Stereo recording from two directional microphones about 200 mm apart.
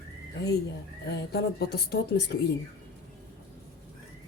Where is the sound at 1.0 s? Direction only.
55° left (ahead or behind).